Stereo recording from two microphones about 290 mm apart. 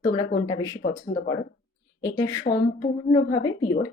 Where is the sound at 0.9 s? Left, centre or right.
Centre.